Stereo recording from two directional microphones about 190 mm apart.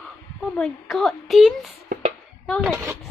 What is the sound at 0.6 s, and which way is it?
A woman's voice, centre (ahead or behind).